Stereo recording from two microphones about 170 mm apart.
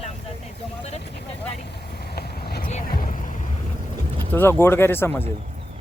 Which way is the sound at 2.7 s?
55° left (ahead or behind).